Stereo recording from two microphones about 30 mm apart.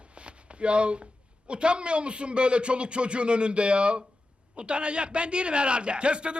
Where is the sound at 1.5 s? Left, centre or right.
Right.